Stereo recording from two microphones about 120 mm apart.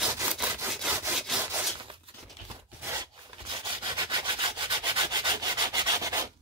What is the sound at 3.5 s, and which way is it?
Rub, 40° right (ahead or behind).